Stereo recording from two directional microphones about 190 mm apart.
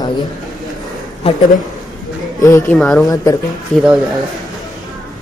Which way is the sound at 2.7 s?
Centre (ahead or behind).